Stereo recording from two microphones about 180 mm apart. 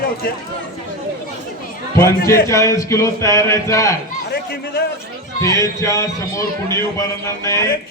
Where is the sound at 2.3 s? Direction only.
15° left (ahead or behind).